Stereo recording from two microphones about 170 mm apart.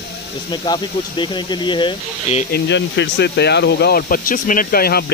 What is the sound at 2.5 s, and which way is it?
Speech, 80° left.